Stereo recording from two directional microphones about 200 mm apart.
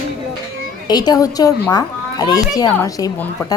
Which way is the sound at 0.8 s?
20° left (ahead or behind).